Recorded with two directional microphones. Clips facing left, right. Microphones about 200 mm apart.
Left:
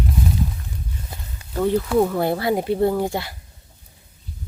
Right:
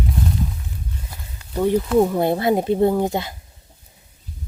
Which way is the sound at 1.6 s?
15° right (ahead or behind).